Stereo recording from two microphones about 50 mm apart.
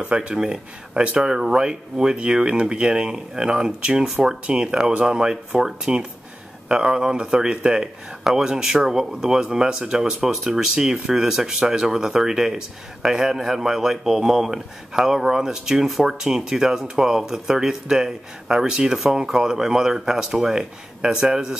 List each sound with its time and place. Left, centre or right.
0.1 s speech: right
0.4 s speech: centre